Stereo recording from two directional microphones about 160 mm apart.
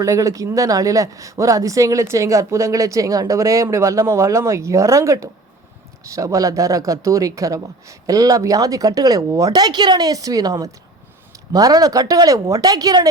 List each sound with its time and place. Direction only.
0.0 s speech: 20° right (ahead or behind)